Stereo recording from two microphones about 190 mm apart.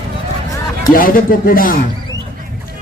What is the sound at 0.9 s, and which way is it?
Speech, 45° left (ahead or behind).